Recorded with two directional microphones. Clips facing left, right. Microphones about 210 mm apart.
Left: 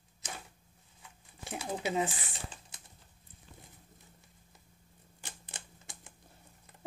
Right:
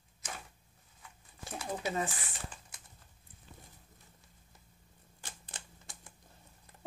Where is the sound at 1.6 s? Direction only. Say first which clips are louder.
Left 1 dB; 25° left (ahead or behind).